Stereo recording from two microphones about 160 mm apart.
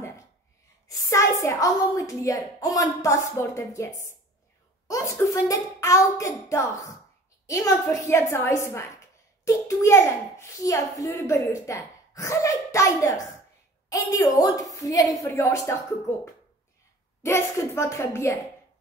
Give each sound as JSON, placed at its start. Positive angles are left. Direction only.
{"t": 0.8, "sound": "a child's voice", "side_deg": 20}
{"t": 17.2, "sound": "a woman's voice", "side_deg": 15}